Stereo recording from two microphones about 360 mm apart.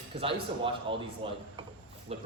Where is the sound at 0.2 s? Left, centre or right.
Centre.